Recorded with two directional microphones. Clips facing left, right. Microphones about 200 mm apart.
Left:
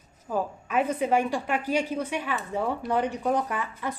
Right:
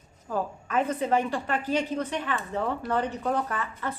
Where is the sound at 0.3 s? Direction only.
10° left (ahead or behind).